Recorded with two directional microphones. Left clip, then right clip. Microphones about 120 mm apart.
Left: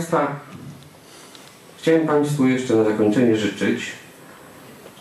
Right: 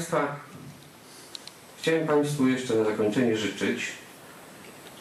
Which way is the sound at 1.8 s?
15° right (ahead or behind).